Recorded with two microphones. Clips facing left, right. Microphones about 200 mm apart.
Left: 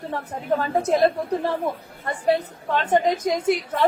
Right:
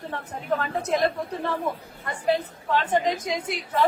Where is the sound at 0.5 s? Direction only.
30° left (ahead or behind).